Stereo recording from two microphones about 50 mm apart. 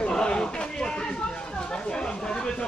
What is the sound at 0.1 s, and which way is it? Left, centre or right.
Chatter, centre.